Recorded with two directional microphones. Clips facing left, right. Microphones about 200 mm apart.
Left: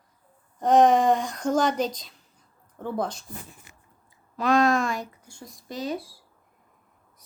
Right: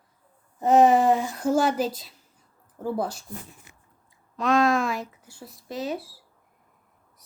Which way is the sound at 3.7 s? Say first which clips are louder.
Even; 85° left.